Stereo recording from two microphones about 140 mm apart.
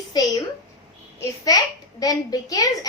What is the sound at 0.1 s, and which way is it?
Speech, 30° left (ahead or behind).